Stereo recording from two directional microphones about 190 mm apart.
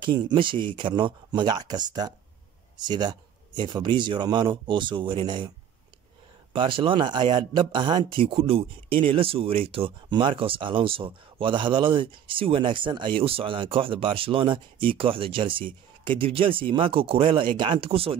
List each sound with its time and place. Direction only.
0.0 s speech: 25° right (ahead or behind)
6.5 s speech: 25° right (ahead or behind)